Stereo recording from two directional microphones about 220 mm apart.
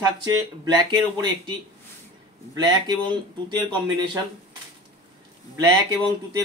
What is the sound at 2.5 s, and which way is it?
Speech, 20° right (ahead or behind).